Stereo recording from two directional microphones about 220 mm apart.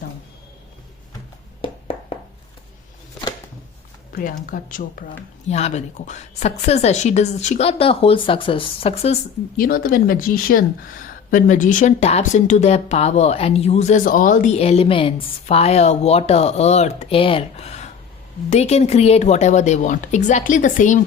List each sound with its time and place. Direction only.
4.1 s speech: 40° left (ahead or behind)
9.6 s speech: 40° left (ahead or behind)